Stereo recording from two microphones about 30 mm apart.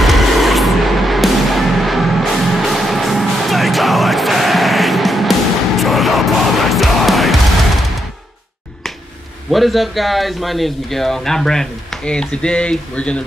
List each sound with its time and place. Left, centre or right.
0.0 s music: centre
9.5 s a man's voice: centre
12.0 s speech: left